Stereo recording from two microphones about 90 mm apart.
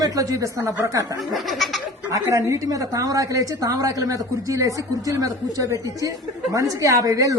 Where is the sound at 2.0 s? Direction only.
35° right (ahead or behind).